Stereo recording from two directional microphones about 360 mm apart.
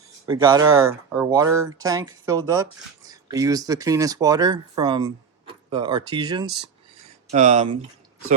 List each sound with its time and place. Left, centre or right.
0.3 s speech: centre